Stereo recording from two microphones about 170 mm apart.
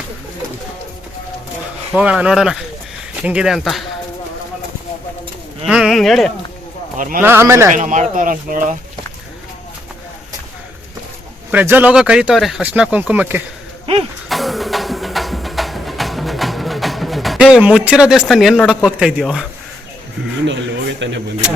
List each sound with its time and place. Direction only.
1.9 s speech: 5° right (ahead or behind)
5.6 s speech: 5° right (ahead or behind)
6.9 s a man's voice: 50° right (ahead or behind)
7.2 s speech: 15° right (ahead or behind)
7.7 s speech: 50° right (ahead or behind)
11.5 s speech: 10° right (ahead or behind)
14.3 s music: centre (ahead or behind)
18.9 s speech: 5° right (ahead or behind)
21.0 s speech: 90° right